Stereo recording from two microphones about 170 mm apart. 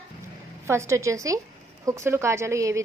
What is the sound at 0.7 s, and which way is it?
A woman's voice, 15° right (ahead or behind).